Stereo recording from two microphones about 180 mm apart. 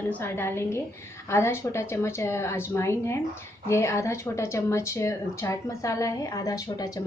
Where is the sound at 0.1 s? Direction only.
10° left (ahead or behind).